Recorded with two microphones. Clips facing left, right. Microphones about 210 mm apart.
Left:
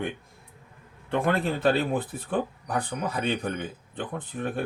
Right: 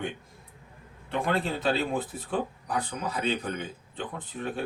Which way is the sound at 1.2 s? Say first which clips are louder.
Left 3 dB; 55° left (ahead or behind).